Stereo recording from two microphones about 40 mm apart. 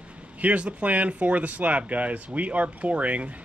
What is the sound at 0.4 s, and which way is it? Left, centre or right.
Speech, right.